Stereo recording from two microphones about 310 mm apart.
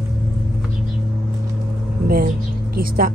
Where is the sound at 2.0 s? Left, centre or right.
Right.